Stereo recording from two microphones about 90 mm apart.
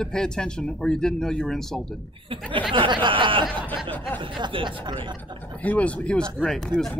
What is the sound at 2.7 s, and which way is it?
Speech, 65° right (ahead or behind).